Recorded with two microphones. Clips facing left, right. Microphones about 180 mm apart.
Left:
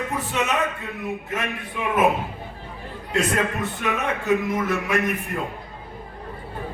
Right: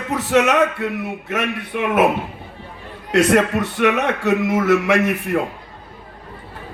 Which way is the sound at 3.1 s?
80° right.